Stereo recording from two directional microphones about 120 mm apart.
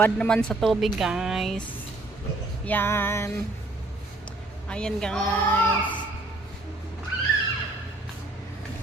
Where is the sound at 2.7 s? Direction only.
20° left (ahead or behind).